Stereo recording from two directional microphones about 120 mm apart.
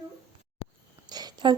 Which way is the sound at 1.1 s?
35° right (ahead or behind).